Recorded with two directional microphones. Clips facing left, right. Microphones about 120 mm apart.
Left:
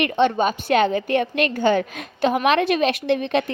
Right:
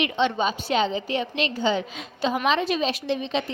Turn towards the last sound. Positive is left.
turn(degrees=60)  # may be behind; listen again after turning